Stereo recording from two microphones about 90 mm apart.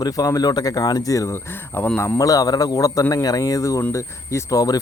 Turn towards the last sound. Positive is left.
turn(degrees=40)  # may be behind; listen again after turning